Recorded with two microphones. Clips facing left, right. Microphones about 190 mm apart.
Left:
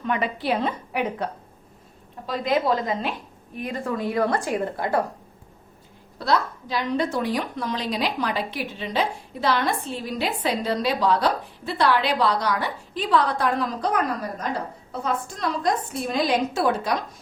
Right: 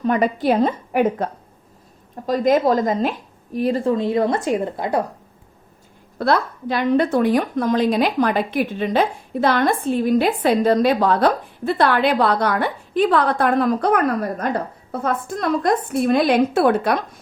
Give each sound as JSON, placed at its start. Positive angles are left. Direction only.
{"t": 0.0, "sound": "a woman's voice", "side_deg": -40}
{"t": 6.1, "sound": "a woman's voice", "side_deg": -55}